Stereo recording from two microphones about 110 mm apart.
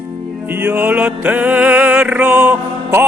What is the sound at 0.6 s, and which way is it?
Music, 15° right (ahead or behind).